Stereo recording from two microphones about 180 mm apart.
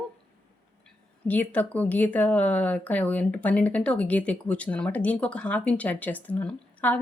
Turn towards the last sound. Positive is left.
turn(degrees=10)  # may be behind; listen again after turning